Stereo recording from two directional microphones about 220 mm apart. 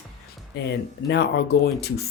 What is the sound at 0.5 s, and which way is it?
Speech, 50° left (ahead or behind).